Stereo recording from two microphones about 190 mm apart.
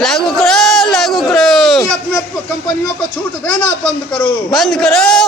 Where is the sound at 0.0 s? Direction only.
Centre (ahead or behind).